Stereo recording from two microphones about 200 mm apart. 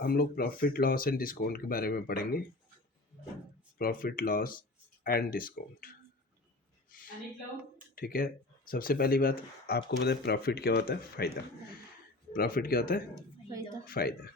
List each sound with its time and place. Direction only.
0.0 s speech: 50° left (ahead or behind)
3.8 s speech: 45° left (ahead or behind)
7.9 s speech: 45° left (ahead or behind)
12.3 s speech: 45° left (ahead or behind)